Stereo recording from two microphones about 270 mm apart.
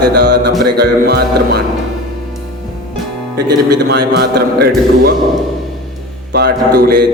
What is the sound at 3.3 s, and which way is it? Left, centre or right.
Speech, right.